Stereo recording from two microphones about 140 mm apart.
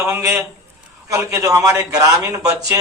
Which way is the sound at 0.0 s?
20° right (ahead or behind).